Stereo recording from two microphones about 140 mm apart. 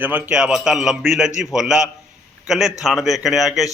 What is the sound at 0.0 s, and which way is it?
A man's voice, 10° right (ahead or behind).